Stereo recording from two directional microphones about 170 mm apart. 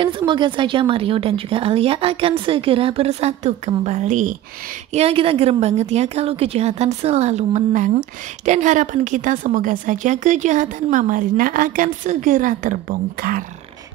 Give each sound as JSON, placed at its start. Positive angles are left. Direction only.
{"t": 0.0, "sound": "a woman's voice", "side_deg": -30}
{"t": 4.9, "sound": "a woman's voice", "side_deg": -35}